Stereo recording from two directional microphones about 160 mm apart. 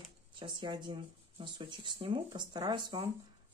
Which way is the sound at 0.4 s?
30° right (ahead or behind).